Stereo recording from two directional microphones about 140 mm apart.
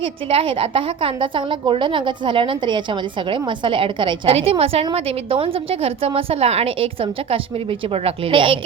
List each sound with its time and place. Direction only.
0.0 s a woman's voice: 40° right (ahead or behind)